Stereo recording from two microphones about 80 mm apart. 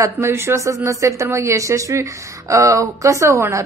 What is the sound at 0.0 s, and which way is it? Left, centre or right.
Speech, right.